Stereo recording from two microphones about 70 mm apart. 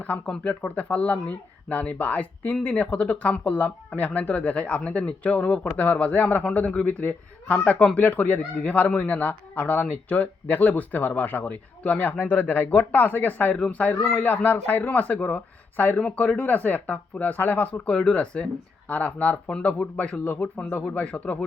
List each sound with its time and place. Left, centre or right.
0.4 s speech: centre